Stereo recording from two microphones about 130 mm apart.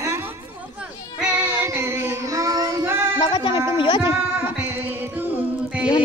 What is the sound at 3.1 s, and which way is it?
Speech, 35° left (ahead or behind).